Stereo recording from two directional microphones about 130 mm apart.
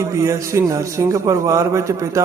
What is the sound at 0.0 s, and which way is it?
A man's voice, 25° right (ahead or behind).